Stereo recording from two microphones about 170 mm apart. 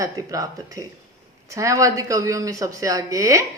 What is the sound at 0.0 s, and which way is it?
Speech, 20° right (ahead or behind).